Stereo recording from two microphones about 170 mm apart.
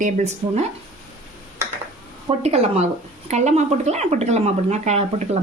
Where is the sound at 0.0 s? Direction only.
45° right (ahead or behind).